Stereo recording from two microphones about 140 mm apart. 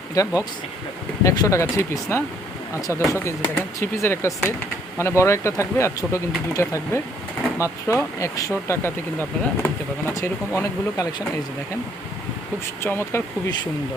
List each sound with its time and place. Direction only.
0.1 s speech: 25° left (ahead or behind)
12.8 s speech: 20° left (ahead or behind)